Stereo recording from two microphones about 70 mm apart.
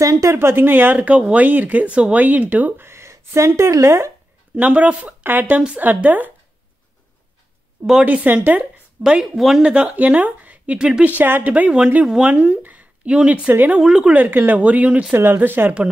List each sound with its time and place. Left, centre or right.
0.0 s speech: right
2.8 s a sound: right
3.7 s speech: right
4.6 s speech: centre
5.6 s speech: centre
5.9 s speech: right
8.0 s speech: centre
14.1 s speech: right
15.1 s speech: right